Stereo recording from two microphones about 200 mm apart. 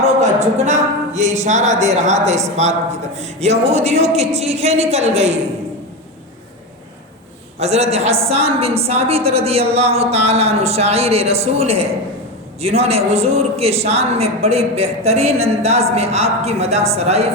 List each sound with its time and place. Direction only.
0.0 s a man's voice: 35° right (ahead or behind)
7.6 s a man's voice: 30° right (ahead or behind)